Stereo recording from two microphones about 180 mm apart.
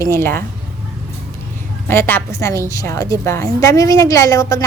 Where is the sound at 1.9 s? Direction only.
10° left (ahead or behind).